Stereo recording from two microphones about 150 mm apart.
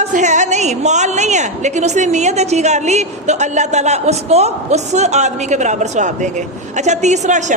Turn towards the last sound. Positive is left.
turn(degrees=-50)  # may be behind; listen again after turning